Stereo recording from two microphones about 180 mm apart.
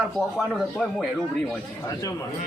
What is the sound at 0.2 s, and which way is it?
Speech, centre (ahead or behind).